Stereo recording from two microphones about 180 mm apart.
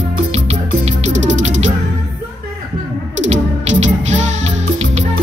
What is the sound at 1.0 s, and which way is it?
Music, 40° right (ahead or behind).